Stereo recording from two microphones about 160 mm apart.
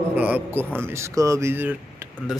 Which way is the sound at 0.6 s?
5° left (ahead or behind).